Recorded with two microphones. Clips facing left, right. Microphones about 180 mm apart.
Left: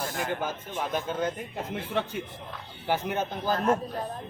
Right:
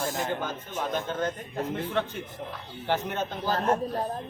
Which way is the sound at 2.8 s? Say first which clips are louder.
Left 1 dB; 10° left (ahead or behind).